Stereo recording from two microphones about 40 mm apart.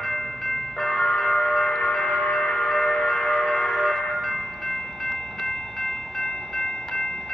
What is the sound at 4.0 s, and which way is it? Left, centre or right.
Train, centre.